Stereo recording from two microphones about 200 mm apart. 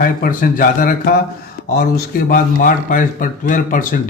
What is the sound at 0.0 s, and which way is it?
Speech, 45° left (ahead or behind).